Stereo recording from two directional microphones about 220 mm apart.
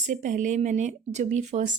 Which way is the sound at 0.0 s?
35° right (ahead or behind).